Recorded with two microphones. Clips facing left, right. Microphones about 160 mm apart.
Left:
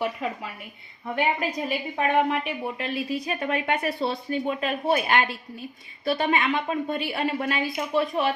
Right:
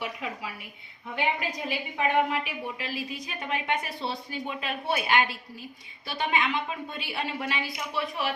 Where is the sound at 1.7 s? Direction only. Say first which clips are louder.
Left 1 dB; 45° left (ahead or behind).